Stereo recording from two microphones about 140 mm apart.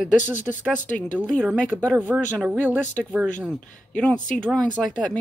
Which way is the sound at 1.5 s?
10° left (ahead or behind).